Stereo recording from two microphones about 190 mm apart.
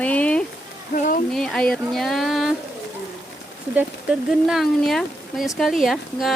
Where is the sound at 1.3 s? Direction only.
5° left (ahead or behind).